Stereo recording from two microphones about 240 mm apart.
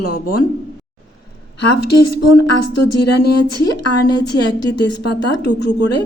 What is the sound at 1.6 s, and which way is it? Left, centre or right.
Speech, left.